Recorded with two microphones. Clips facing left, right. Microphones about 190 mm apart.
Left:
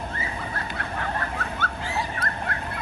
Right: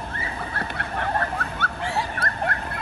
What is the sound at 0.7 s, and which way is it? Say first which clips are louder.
Vehicle: right 5 dB; 55° right (ahead or behind).